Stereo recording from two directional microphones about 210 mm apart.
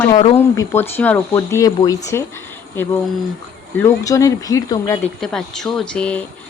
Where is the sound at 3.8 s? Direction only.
15° left (ahead or behind).